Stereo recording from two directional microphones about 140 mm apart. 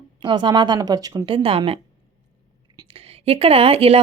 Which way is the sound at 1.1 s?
40° right (ahead or behind).